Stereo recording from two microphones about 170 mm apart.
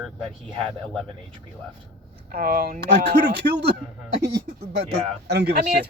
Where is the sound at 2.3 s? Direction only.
55° right (ahead or behind); by 3.7 s 70° right (ahead or behind).